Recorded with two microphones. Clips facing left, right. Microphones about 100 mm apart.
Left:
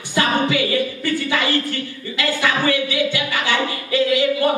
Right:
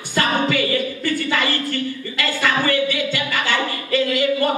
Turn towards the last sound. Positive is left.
turn(degrees=15)  # may be behind; listen again after turning